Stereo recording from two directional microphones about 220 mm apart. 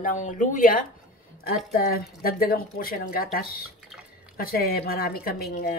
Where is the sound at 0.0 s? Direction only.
35° left (ahead or behind).